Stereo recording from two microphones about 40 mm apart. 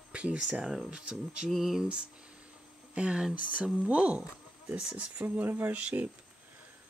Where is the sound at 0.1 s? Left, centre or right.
Right.